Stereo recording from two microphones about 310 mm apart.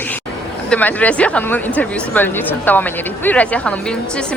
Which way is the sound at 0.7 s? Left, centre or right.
Centre.